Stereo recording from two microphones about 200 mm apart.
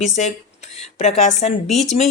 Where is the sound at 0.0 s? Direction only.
35° left (ahead or behind).